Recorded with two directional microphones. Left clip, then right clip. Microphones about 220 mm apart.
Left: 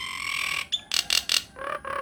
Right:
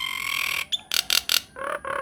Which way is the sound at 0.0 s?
20° right (ahead or behind).